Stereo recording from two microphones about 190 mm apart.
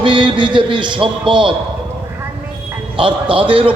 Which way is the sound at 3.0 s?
25° right (ahead or behind).